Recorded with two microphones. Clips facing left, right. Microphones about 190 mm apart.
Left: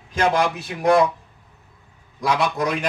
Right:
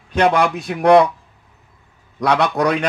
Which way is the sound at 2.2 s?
70° right (ahead or behind).